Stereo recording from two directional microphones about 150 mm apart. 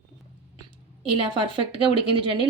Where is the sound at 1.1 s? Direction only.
35° right (ahead or behind).